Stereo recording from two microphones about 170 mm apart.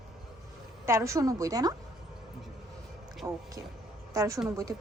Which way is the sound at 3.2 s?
20° right (ahead or behind).